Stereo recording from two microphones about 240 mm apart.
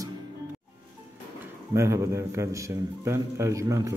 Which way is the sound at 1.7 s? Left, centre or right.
Centre.